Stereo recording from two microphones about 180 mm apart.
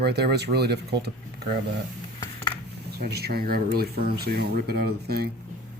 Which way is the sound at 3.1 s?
60° right (ahead or behind).